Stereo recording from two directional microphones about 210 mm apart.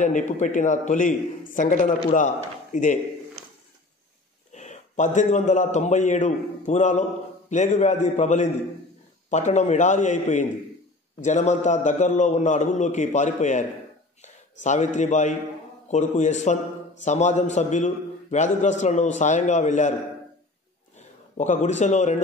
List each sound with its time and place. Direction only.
0.0 s a man's voice: 35° left (ahead or behind)
4.5 s a man's voice: 35° left (ahead or behind)
21.4 s a man's voice: 35° left (ahead or behind)